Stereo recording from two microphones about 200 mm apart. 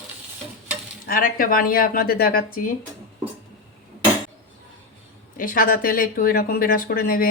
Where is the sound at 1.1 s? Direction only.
45° left (ahead or behind).